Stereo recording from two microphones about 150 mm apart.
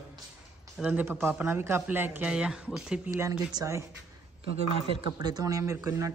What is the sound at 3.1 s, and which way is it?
Speech, 20° right (ahead or behind).